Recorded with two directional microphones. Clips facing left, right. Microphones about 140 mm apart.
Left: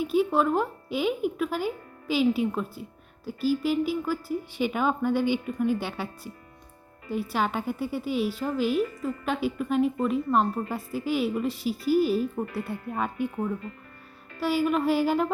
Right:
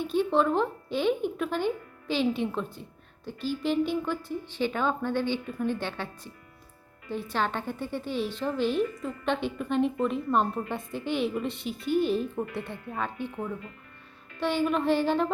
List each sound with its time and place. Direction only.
0.0 s speech: 10° left (ahead or behind)
12.7 s speech: 40° left (ahead or behind)
14.3 s speech: 5° left (ahead or behind)